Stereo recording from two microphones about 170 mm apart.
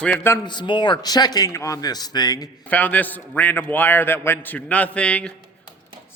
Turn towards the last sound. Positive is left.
turn(degrees=5)  # may be behind; listen again after turning